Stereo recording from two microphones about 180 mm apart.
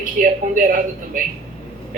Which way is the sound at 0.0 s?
50° right (ahead or behind).